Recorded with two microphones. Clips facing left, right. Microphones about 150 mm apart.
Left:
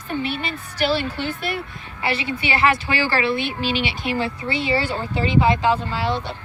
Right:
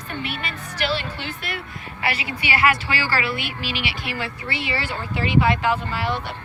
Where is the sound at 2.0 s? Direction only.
25° left (ahead or behind).